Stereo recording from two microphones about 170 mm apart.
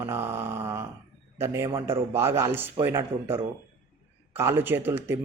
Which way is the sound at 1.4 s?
15° right (ahead or behind).